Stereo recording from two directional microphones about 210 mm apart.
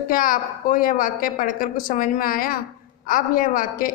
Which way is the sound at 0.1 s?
40° left (ahead or behind).